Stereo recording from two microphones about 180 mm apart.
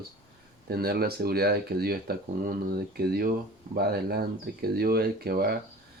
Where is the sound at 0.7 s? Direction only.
60° right (ahead or behind).